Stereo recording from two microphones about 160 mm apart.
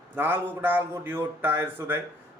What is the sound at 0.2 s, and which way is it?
A man's voice, 15° right (ahead or behind).